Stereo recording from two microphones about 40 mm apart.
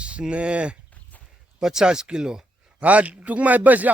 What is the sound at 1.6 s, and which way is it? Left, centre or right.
Speech, centre.